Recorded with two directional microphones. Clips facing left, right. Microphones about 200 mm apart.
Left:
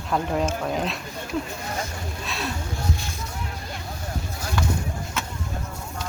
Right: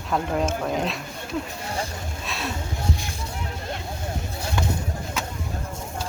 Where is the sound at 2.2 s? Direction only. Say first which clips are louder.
Even; centre (ahead or behind).